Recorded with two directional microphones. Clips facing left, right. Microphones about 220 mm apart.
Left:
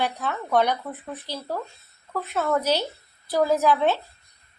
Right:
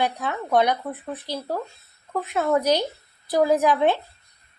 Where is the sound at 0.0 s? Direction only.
15° right (ahead or behind).